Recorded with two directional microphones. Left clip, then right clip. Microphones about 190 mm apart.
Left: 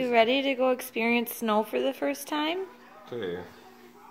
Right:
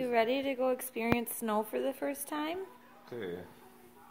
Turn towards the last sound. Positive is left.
turn(degrees=-45)  # may be behind; listen again after turning